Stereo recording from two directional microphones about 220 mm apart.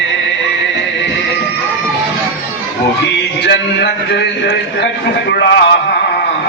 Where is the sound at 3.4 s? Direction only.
55° left (ahead or behind).